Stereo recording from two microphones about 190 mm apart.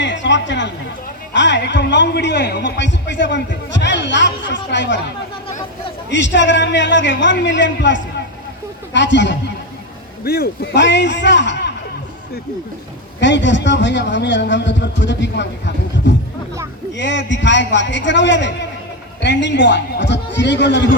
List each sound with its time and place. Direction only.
0.0 s a sound: 70° left (ahead or behind)
1.3 s a man's voice: 70° left (ahead or behind)
6.1 s a man's voice: 70° left (ahead or behind)
10.2 s a man's voice: 55° left (ahead or behind)
13.1 s a man's voice: 70° left (ahead or behind)